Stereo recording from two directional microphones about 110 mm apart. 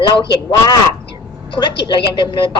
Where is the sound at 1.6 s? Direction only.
45° left (ahead or behind).